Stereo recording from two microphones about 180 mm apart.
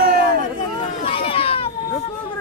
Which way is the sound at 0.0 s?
60° right (ahead or behind).